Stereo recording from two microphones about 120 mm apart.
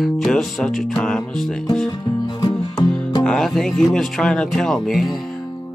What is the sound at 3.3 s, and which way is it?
Speech, 5° left (ahead or behind).